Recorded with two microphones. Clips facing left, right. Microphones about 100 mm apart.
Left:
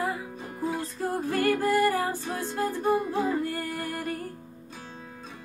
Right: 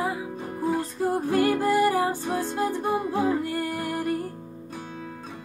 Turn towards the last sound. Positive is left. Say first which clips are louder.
# right 4 dB
turn(degrees=-15)  # may be behind; listen again after turning